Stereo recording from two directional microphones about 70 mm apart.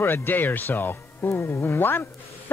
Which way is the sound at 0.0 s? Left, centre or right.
Left.